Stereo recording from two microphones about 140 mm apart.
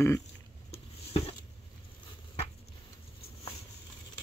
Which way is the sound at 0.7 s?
45° left (ahead or behind).